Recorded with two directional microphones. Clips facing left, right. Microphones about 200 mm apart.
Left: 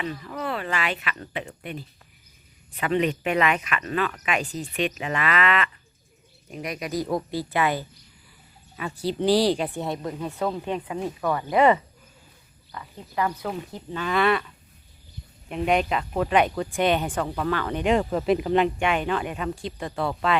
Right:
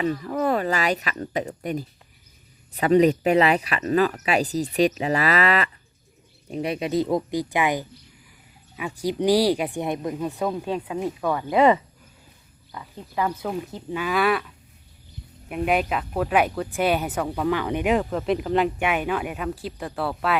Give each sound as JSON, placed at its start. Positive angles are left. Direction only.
{"t": 0.0, "sound": "speech", "side_deg": -40}
{"t": 17.9, "sound": "speech", "side_deg": 0}